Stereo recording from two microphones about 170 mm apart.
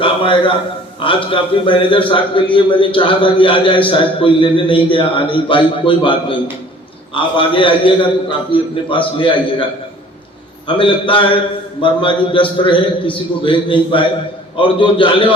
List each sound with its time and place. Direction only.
0.0 s a man's voice: 30° left (ahead or behind)
10.7 s a man's voice: 30° left (ahead or behind)